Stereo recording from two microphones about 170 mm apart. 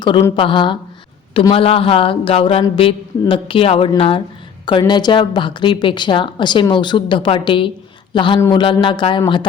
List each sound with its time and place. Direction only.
0.3 s speech: 30° left (ahead or behind)